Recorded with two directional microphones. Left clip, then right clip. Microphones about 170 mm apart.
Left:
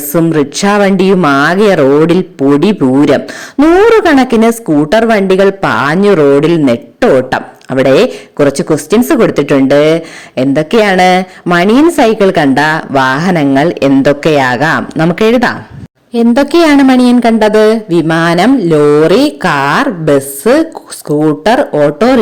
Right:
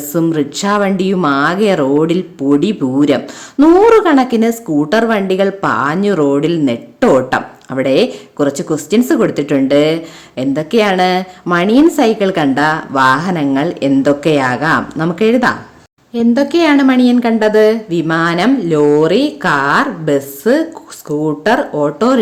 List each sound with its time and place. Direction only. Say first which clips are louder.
0.1 s a woman's voice: left 5 dB; 30° left (ahead or behind)